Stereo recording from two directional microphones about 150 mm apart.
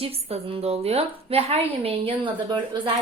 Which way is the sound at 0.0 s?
40° right (ahead or behind).